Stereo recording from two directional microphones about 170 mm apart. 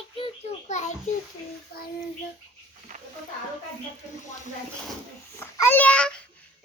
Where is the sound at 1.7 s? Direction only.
65° left (ahead or behind).